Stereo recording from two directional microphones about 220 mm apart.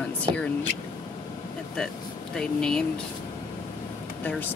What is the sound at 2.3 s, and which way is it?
Speech, 5° left (ahead or behind).